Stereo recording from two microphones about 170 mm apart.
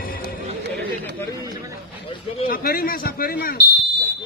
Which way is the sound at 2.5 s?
60° left (ahead or behind).